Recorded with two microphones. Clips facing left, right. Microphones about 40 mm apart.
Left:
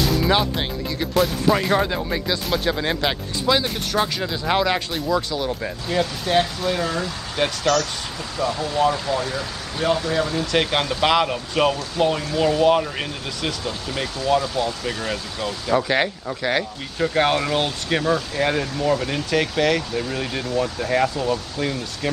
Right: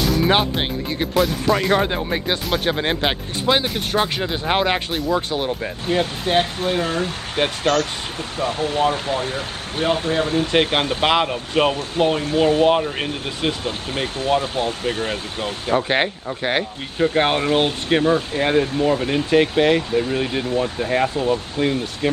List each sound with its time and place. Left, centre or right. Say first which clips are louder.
0.2 s speech: right 2 dB; right
1.1 s speech: even; centre
1.7 s speech: right 2 dB; right
2.2 s speech: right 1 dB; right
3.9 s speech: right 1 dB; centre
4.3 s speech: right 1 dB; right